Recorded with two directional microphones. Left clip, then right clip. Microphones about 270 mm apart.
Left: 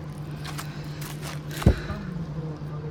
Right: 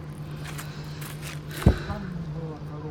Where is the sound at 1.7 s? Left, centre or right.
Left.